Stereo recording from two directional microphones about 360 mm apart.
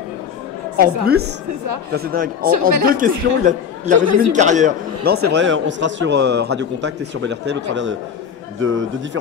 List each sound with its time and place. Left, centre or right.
0.7 s a man's voice: right
8.5 s a man's voice: right